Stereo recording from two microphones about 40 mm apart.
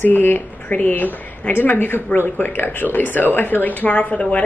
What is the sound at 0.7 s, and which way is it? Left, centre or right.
Speech, left.